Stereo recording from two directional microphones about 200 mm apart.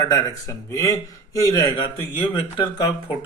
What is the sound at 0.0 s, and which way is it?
Speech, 15° left (ahead or behind).